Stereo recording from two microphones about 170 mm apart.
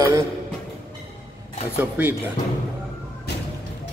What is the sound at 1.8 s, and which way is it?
Speech, 10° right (ahead or behind).